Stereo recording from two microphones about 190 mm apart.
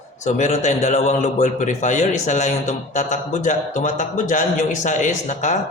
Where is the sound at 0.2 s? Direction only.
40° left (ahead or behind).